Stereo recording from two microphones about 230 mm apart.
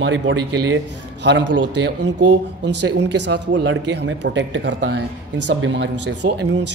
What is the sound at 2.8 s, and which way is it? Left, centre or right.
A man's voice, right.